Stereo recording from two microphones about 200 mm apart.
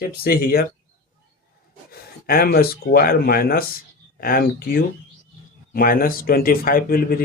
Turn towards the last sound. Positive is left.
turn(degrees=45)  # may be behind; listen again after turning